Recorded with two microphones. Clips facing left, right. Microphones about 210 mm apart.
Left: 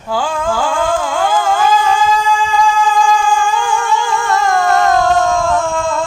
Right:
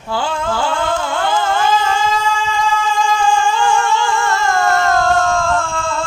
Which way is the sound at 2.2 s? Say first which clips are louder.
Left 4 dB; 15° left (ahead or behind).